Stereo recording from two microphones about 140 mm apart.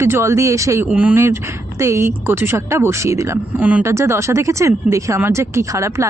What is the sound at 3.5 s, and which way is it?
Speech, 10° right (ahead or behind).